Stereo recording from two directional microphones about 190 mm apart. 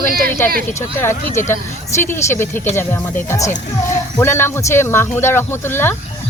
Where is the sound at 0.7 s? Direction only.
15° left (ahead or behind).